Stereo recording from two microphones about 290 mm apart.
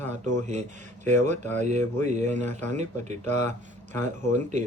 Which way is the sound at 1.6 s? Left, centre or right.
Right.